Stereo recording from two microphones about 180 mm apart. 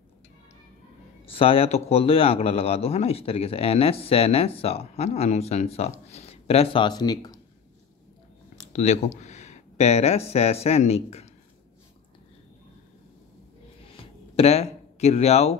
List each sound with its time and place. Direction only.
1.2 s a man's voice: 30° left (ahead or behind)
8.7 s speech: 40° left (ahead or behind)
13.8 s a sound: 35° left (ahead or behind)